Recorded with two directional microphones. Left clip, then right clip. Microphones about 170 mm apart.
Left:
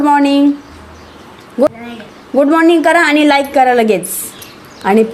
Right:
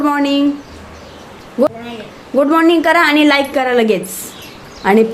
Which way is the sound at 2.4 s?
15° left (ahead or behind).